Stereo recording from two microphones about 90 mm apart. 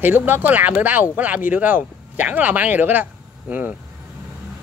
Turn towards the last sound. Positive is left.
turn(degrees=-15)  # may be behind; listen again after turning